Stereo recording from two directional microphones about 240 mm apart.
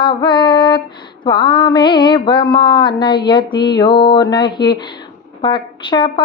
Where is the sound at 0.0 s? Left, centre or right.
Centre.